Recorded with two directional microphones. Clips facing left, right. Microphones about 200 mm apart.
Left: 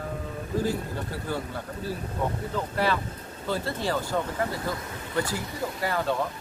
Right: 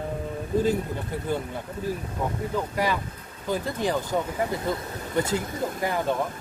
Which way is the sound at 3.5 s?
15° right (ahead or behind).